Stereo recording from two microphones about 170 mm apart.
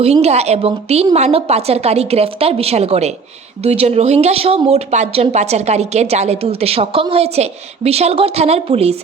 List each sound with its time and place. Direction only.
0.0 s a woman's voice: 40° right (ahead or behind)